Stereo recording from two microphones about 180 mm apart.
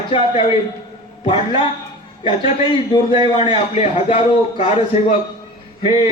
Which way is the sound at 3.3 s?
30° left (ahead or behind).